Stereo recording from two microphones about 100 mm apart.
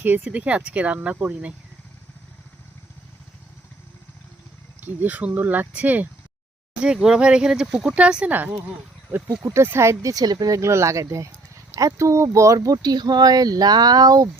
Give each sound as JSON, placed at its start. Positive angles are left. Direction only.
{"t": 0.0, "sound": "speech", "side_deg": -15}
{"t": 4.8, "sound": "speech", "side_deg": -15}
{"t": 9.4, "sound": "speech", "side_deg": -30}